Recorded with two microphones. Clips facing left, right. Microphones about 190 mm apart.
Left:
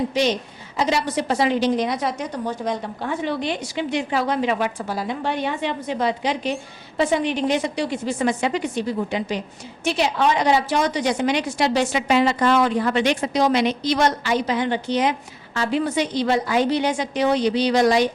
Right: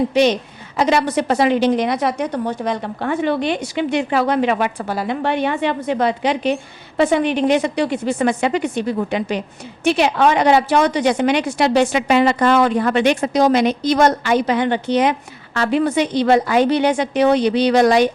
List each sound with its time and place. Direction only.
0.1 s a woman's voice: 60° right (ahead or behind)